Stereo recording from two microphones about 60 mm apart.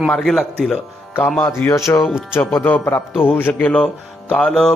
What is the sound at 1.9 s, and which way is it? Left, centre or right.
Speech, left.